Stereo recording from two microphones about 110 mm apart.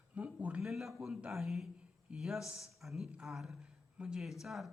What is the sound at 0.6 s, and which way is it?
Speech, centre (ahead or behind).